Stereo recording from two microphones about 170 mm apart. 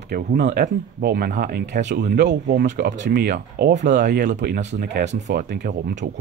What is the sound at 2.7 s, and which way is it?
Speech, 90° right.